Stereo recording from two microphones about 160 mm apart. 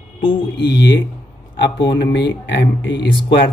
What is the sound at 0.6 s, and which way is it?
Speech, 90° left.